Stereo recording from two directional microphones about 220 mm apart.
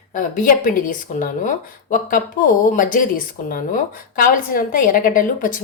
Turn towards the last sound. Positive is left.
turn(degrees=40)  # may be behind; listen again after turning